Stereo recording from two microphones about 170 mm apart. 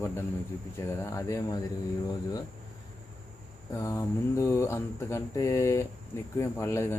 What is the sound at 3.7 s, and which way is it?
Speech, 15° left (ahead or behind).